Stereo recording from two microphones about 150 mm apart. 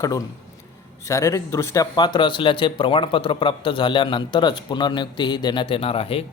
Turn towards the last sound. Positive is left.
turn(degrees=40)  # may be behind; listen again after turning